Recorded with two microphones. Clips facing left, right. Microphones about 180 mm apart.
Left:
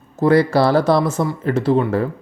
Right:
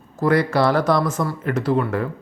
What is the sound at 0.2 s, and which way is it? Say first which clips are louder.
Speech: left 4 dB; 30° left (ahead or behind).